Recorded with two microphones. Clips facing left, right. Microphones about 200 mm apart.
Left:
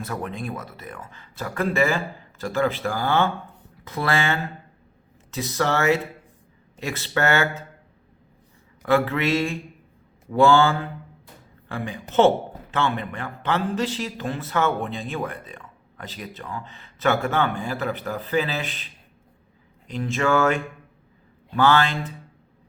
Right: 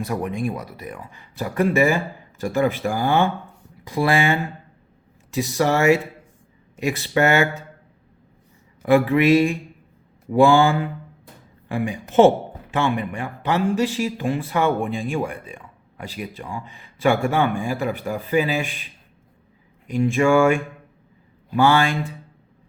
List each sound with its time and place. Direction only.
0.0 s a man's voice: 15° right (ahead or behind)
8.8 s a man's voice: 15° right (ahead or behind)
19.9 s a man's voice: 15° right (ahead or behind)